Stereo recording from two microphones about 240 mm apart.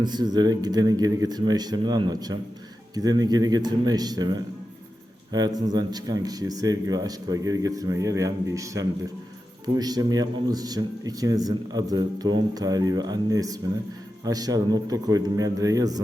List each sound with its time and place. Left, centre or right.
0.0 s a man's voice: centre
5.5 s a man's voice: centre